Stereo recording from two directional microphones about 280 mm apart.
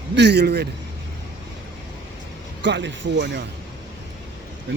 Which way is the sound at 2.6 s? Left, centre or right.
Right.